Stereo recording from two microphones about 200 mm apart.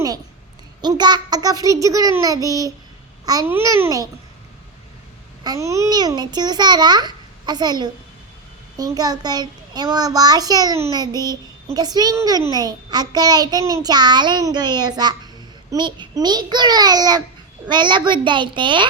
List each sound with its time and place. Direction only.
0.8 s a child's voice: 20° right (ahead or behind)
5.4 s a child's voice: 15° right (ahead or behind)